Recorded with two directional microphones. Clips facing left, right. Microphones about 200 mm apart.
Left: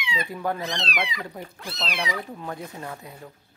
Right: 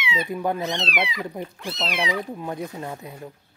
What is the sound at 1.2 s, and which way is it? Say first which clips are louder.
Speech: right 5 dB; 20° right (ahead or behind).